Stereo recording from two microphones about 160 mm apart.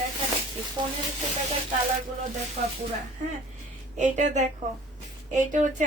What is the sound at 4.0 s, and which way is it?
Speech, 45° right (ahead or behind).